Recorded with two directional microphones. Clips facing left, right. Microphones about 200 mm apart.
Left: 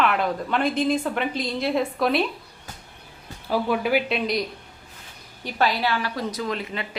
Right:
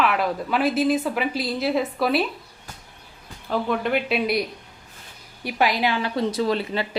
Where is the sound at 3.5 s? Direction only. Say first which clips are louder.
Left 1 dB; 5° left (ahead or behind); by 6.8 s 30° right (ahead or behind).